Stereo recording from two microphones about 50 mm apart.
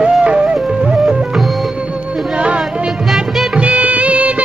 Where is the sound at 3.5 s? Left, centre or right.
Right.